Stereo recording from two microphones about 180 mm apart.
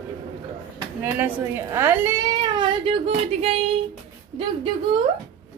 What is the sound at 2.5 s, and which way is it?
A woman's voice, 35° right (ahead or behind).